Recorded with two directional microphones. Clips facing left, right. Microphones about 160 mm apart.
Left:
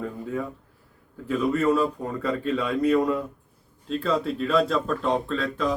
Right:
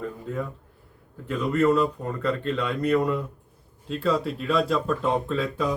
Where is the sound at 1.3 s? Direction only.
10° left (ahead or behind).